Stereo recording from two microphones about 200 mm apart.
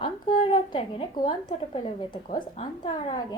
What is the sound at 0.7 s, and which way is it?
A woman's voice, 25° left (ahead or behind).